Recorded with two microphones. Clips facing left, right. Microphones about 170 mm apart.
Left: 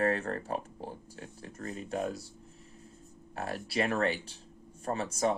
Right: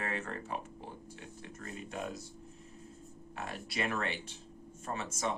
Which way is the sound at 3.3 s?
40° left (ahead or behind).